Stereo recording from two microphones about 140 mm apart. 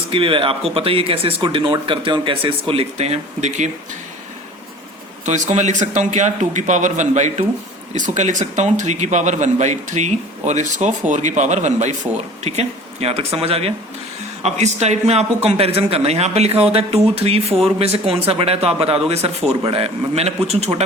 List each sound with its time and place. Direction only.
0.1 s speech: 40° right (ahead or behind)
5.2 s a man's voice: 55° right (ahead or behind)